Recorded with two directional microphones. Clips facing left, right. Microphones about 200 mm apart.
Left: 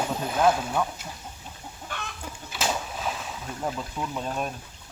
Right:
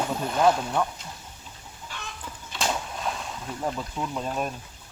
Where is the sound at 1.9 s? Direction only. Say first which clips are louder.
Left 4 dB; 55° left (ahead or behind).